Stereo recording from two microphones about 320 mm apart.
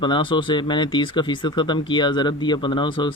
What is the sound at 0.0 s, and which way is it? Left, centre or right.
Speech, centre.